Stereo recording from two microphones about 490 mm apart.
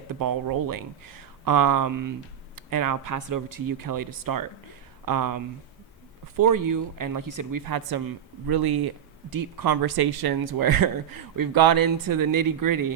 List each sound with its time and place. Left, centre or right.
0.1 s speech: right